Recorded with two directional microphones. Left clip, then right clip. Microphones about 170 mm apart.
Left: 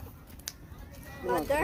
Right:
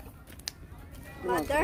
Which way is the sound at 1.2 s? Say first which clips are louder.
Even; 40° right (ahead or behind).